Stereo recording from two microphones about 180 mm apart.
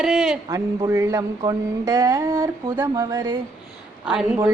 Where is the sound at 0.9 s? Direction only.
15° right (ahead or behind).